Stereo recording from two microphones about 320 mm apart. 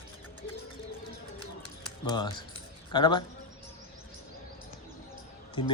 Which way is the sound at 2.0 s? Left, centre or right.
Centre.